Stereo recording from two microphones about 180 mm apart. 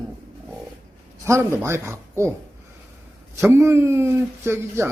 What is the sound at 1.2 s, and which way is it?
A man's voice, 15° right (ahead or behind).